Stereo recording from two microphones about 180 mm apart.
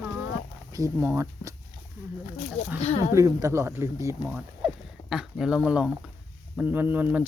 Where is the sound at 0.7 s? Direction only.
15° right (ahead or behind).